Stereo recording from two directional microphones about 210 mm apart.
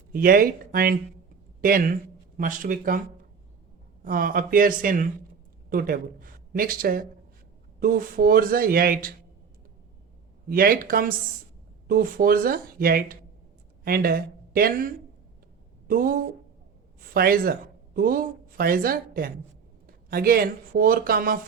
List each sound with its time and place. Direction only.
0.1 s speech: 45° right (ahead or behind)
4.0 s speech: 40° right (ahead or behind)
10.5 s speech: 45° right (ahead or behind)
15.9 s speech: 45° right (ahead or behind)